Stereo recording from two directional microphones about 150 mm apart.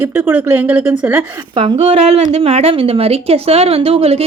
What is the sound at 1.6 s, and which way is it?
A woman's voice, 35° right (ahead or behind).